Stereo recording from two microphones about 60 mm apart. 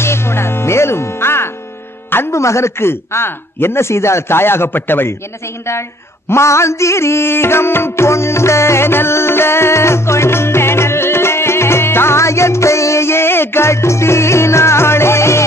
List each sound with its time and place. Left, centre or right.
0.0 s music: left
2.3 s speech: left
5.7 s a sound: left